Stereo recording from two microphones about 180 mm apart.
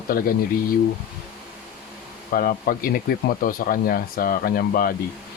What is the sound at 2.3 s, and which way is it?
Speech, 55° left (ahead or behind).